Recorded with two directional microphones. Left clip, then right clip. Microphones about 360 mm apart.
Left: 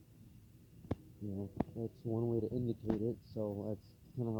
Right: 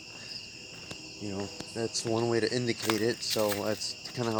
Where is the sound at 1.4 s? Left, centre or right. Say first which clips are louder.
Right 7 dB; right.